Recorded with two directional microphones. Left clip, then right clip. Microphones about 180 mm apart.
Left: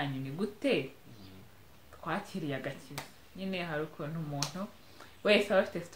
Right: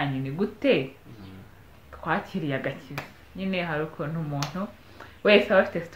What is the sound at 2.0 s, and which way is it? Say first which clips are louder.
Speech: right 9 dB; 10° right (ahead or behind).